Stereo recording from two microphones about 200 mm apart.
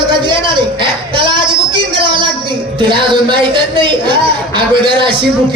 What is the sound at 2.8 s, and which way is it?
Speech, 25° right (ahead or behind).